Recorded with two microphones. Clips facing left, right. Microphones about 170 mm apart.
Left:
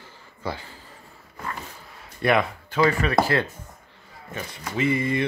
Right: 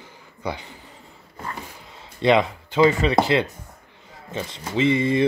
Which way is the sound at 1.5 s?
20° right (ahead or behind).